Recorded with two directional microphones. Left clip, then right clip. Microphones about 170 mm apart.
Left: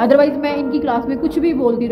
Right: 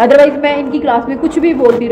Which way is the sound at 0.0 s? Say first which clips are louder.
Right 6 dB; 30° left (ahead or behind).